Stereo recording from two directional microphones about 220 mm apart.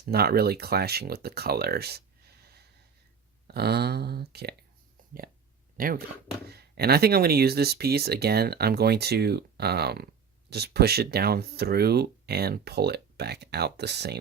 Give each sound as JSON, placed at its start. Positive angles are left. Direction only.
{"t": 0.0, "sound": "speech", "side_deg": -45}
{"t": 3.4, "sound": "speech", "side_deg": -45}
{"t": 5.7, "sound": "speech", "side_deg": -40}